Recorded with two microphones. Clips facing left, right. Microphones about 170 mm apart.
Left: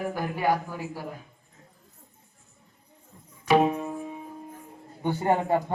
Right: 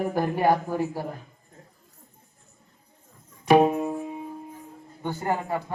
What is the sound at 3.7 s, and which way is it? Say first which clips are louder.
Music: right 4 dB; 20° right (ahead or behind).